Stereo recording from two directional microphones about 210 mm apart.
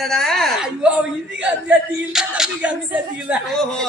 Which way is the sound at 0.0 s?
Centre (ahead or behind).